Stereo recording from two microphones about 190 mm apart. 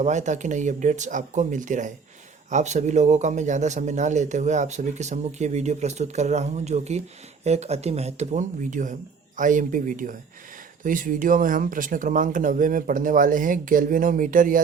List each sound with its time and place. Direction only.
0.0 s a man's voice: 40° right (ahead or behind)